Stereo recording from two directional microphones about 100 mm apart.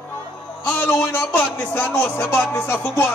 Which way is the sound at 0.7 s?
20° left (ahead or behind).